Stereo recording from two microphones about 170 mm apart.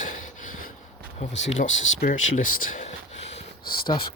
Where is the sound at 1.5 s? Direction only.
50° left (ahead or behind).